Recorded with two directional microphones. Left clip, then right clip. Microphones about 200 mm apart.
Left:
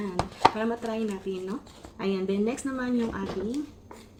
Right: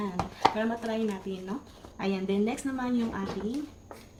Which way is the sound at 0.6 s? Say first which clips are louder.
Left 1 dB; 5° right (ahead or behind).